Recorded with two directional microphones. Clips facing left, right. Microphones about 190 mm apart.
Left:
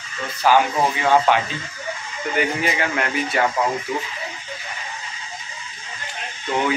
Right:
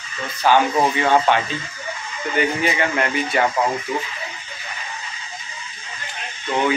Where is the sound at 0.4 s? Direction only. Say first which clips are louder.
Right 1 dB; 5° left (ahead or behind).